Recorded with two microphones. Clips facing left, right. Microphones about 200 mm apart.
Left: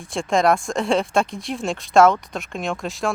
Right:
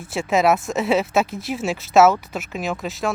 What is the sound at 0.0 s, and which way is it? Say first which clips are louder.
Speech: even; 5° right (ahead or behind).